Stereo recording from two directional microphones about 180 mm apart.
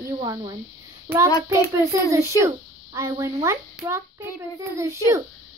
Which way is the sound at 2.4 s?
15° right (ahead or behind).